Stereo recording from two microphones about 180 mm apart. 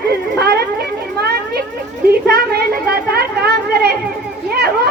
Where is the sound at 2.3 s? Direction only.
60° right (ahead or behind).